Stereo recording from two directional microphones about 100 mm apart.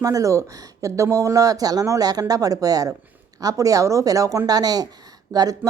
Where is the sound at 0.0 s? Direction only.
35° right (ahead or behind).